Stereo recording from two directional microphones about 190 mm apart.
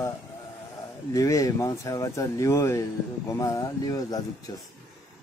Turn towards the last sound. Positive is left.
turn(degrees=20)  # may be behind; listen again after turning